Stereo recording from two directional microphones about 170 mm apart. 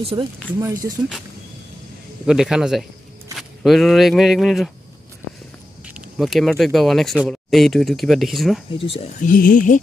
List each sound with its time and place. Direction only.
0.0 s speech: 30° right (ahead or behind)
0.6 s speech: 20° right (ahead or behind)
2.2 s speech: 5° right (ahead or behind)
5.9 s speech: centre (ahead or behind)
8.7 s speech: 35° left (ahead or behind)
9.2 s speech: 55° left (ahead or behind)